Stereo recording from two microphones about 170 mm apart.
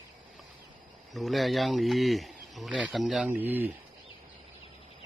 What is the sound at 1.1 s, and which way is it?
Speech, centre (ahead or behind).